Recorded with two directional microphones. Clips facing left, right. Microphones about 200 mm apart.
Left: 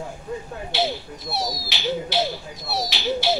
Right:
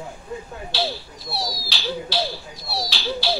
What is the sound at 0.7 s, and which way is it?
Speech, 20° left (ahead or behind).